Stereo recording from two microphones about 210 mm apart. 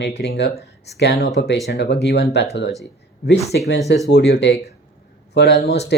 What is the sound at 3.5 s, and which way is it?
Speech, 60° left (ahead or behind).